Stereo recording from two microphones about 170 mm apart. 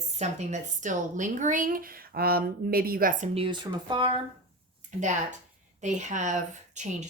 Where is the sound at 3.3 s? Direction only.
30° right (ahead or behind).